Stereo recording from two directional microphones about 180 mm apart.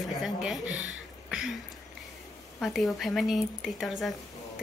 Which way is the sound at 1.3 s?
5° right (ahead or behind).